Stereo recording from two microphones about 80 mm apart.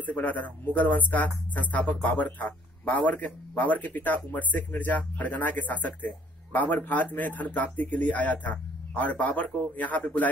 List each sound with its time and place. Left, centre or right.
0.0 s speech: left